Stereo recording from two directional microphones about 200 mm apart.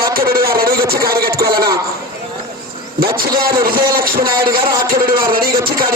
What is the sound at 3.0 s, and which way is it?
A man's voice, 45° right (ahead or behind).